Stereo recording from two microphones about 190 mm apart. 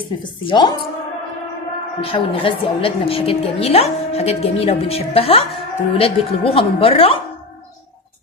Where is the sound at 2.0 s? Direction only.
30° left (ahead or behind).